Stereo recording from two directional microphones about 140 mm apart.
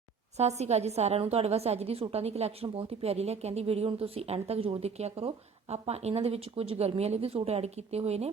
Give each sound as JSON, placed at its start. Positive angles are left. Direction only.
{"t": 0.3, "sound": "a woman's voice", "side_deg": -50}